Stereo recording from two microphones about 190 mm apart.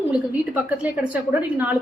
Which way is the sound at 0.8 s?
10° right (ahead or behind).